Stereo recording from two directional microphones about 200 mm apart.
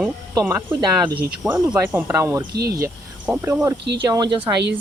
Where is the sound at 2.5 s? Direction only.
50° right (ahead or behind).